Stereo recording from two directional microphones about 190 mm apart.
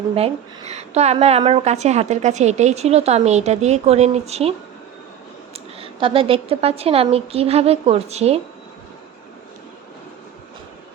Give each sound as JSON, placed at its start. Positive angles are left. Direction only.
{"t": 0.2, "sound": "a woman's voice", "side_deg": -35}
{"t": 5.5, "sound": "a woman's voice", "side_deg": -30}